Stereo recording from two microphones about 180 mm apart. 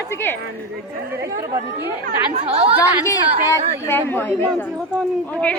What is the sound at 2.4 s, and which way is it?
Speech, 35° right (ahead or behind).